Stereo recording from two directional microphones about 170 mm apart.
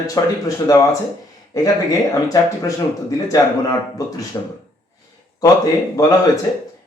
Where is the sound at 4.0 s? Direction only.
20° left (ahead or behind).